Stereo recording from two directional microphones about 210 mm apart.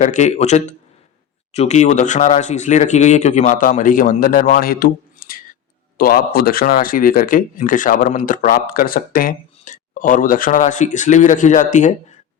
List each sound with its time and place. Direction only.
0.0 s speech: 35° left (ahead or behind)